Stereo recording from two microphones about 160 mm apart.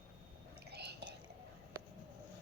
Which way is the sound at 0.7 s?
90° right.